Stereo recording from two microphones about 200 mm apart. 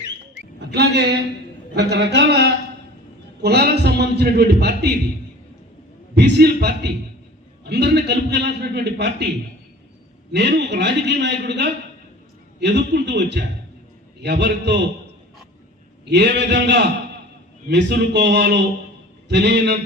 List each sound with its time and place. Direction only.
0.3 s a sound: 55° right (ahead or behind)
1.7 s a man's voice: 60° right (ahead or behind)
6.1 s a man's voice: 60° right (ahead or behind)
10.3 s a man's voice: 60° right (ahead or behind)
16.0 s a man's voice: 60° right (ahead or behind)